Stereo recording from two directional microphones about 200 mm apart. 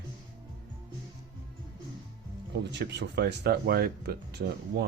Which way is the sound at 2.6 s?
60° right (ahead or behind).